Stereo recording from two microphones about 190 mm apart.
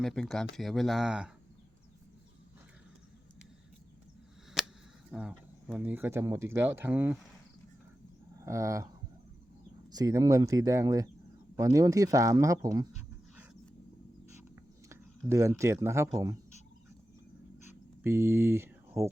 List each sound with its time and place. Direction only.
0.0 s speech: centre (ahead or behind)
4.6 s a sound: centre (ahead or behind)
5.1 s speech: 5° right (ahead or behind)
8.4 s speech: 15° right (ahead or behind)
9.9 s speech: 20° right (ahead or behind)
14.3 s a sound: 15° right (ahead or behind)
15.3 s speech: 15° right (ahead or behind)
18.0 s speech: 15° right (ahead or behind)